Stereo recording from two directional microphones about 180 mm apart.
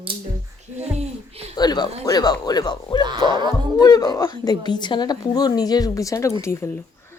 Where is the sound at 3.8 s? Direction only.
20° left (ahead or behind).